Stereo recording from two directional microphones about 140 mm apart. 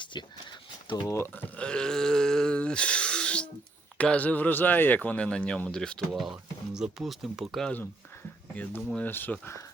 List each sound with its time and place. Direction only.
0.0 s speech: 35° left (ahead or behind)
0.9 s a sound: 25° left (ahead or behind); by 3.5 s 5° left (ahead or behind)
3.9 s speech: 10° left (ahead or behind)
9.0 s speech: 15° left (ahead or behind)